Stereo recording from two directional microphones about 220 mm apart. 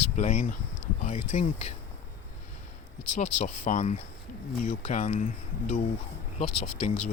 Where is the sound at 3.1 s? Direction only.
35° left (ahead or behind).